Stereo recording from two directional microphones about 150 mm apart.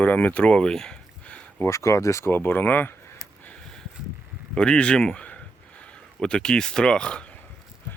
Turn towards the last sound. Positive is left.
turn(degrees=5)  # may be behind; listen again after turning